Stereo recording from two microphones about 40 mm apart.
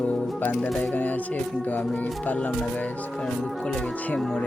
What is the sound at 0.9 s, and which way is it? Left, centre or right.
Music, left.